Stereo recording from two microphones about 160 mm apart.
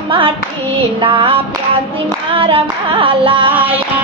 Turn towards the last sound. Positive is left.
turn(degrees=-30)  # may be behind; listen again after turning